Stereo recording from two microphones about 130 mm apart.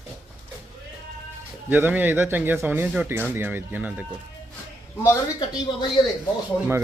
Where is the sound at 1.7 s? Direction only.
15° right (ahead or behind).